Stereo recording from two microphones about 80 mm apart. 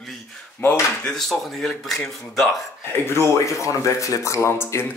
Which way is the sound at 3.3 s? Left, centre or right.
Left.